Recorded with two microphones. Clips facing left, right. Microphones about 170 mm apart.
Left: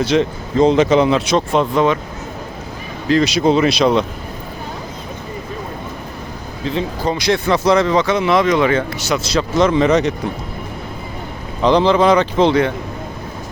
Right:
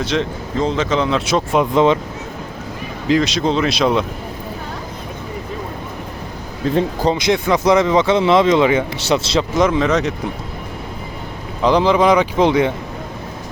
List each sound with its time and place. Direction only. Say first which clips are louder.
0.0 s speech: left 4 dB; 5° left (ahead or behind)
0.6 s speech: left 6 dB; 15° left (ahead or behind)
1.2 s speech: left 1 dB; 5° right (ahead or behind)
1.7 s speech: right 3 dB; 20° right (ahead or behind)
3.2 s speech: left 6 dB; 5° left (ahead or behind)
6.6 s speech: right 4 dB; 45° right (ahead or behind)
7.0 s speech: right 1 dB; 20° right (ahead or behind)
9.7 s speech: left 3 dB; centre (ahead or behind)
11.6 s speech: left 1 dB; 10° right (ahead or behind)